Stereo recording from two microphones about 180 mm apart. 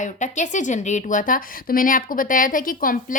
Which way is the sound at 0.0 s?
40° left (ahead or behind).